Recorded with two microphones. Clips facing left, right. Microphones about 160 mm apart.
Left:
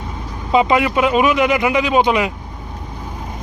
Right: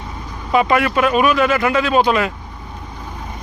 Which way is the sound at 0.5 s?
20° left (ahead or behind).